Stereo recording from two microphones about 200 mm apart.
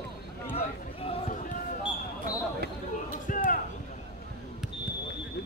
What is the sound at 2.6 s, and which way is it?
Basketball bounce, 50° right (ahead or behind).